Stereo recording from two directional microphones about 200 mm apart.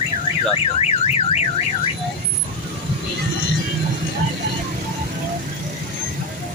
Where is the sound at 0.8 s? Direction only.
35° left (ahead or behind).